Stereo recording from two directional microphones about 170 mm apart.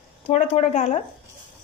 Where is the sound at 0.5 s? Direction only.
40° left (ahead or behind).